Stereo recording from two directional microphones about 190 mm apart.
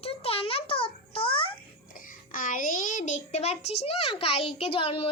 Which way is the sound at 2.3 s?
45° left (ahead or behind).